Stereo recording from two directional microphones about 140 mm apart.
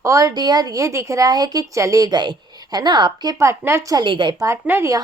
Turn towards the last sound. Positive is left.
turn(degrees=-15)  # may be behind; listen again after turning